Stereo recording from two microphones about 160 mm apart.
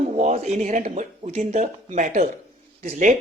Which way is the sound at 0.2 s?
45° right (ahead or behind).